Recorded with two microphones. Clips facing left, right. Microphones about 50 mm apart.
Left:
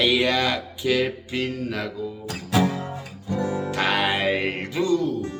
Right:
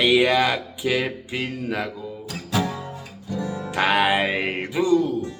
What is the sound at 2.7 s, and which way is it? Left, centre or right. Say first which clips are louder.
Music: left 2 dB; left.